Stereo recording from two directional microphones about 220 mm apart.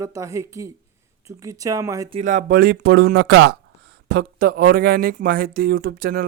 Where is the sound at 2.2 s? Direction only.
35° right (ahead or behind); by 3.6 s 55° right (ahead or behind).